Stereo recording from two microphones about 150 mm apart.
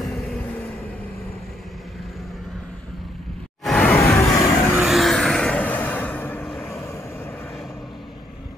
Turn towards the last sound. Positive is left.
turn(degrees=15)  # may be behind; listen again after turning